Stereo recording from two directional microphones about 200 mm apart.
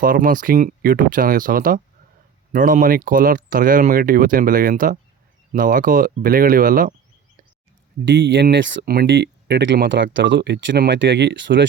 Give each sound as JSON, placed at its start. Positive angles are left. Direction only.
{"t": 0.0, "sound": "speech", "side_deg": -45}
{"t": 8.0, "sound": "speech", "side_deg": -60}